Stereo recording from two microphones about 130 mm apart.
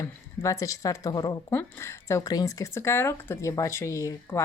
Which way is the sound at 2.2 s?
30° left (ahead or behind).